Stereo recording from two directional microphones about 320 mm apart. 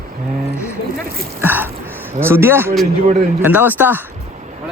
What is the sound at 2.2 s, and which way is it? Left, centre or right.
Speech, centre.